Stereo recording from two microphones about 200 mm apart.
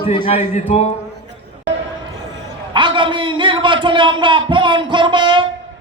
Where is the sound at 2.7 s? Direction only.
25° right (ahead or behind).